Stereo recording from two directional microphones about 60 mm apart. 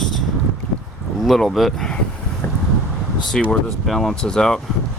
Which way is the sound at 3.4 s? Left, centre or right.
Centre.